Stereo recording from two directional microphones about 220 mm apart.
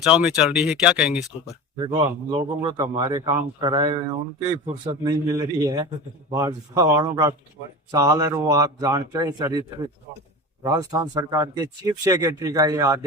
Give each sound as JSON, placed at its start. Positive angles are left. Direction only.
{"t": 0.0, "sound": "a man's voice", "side_deg": -5}